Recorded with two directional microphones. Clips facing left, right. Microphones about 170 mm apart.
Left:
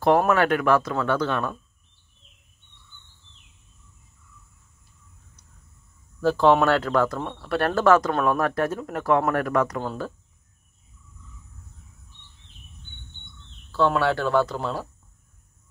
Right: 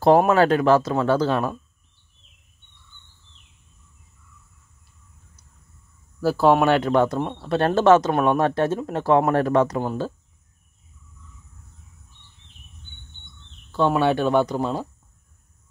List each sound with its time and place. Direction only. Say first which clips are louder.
0.3 s speech: right 3 dB; 30° right (ahead or behind)
6.2 s speech: right 1 dB; 5° right (ahead or behind); by 9.8 s 25° right (ahead or behind)
13.7 s speech: right 2 dB; 20° right (ahead or behind)